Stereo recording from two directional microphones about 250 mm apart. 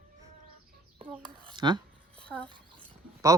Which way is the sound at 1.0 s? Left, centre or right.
Centre.